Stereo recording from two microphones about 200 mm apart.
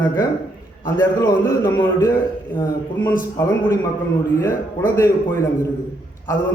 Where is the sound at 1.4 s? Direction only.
15° left (ahead or behind).